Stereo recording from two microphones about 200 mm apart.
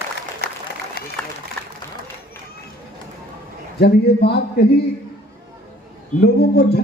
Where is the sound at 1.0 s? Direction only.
50° left (ahead or behind).